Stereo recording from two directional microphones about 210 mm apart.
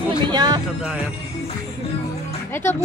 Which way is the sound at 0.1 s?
20° right (ahead or behind).